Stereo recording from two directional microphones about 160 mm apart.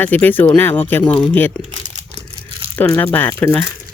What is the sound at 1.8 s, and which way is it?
Crumpling, 50° right (ahead or behind).